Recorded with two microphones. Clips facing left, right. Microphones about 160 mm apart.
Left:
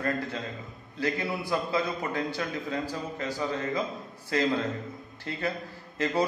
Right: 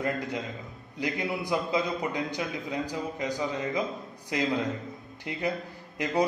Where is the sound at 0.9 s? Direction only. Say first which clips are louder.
Left 1 dB; 15° right (ahead or behind).